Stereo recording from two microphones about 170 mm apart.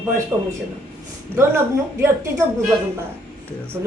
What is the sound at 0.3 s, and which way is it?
A woman's voice, 15° right (ahead or behind).